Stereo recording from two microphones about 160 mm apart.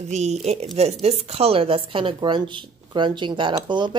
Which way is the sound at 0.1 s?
45° right (ahead or behind).